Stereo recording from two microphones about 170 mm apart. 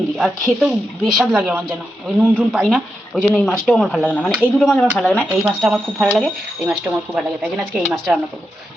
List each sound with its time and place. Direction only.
0.2 s speech: centre (ahead or behind)